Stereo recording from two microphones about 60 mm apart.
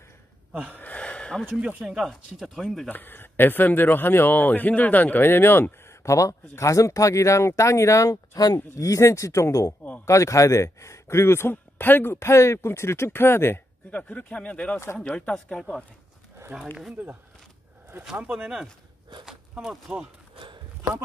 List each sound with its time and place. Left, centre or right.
0.7 s a sound: left
1.8 s speech: centre
2.9 s speech: left
6.0 s speech: left
8.7 s speech: left
11.5 s speech: left
13.8 s speech: left
16.5 s speech: centre
19.9 s speech: centre